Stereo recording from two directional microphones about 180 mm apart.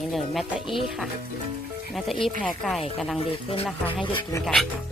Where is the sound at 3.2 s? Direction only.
35° left (ahead or behind).